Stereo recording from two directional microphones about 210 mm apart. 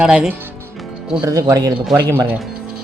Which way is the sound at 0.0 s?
5° right (ahead or behind).